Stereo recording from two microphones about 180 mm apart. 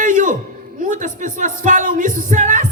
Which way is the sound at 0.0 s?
45° right (ahead or behind).